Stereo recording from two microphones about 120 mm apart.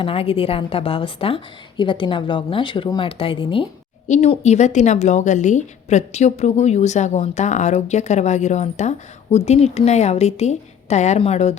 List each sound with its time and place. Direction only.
0.0 s a woman's voice: 50° left (ahead or behind)
4.3 s a woman's voice: 70° left (ahead or behind)